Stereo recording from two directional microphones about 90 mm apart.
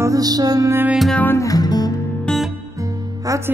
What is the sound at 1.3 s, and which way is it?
Music, 40° left (ahead or behind).